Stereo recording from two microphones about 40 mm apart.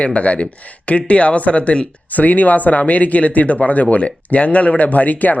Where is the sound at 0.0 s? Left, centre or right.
Left.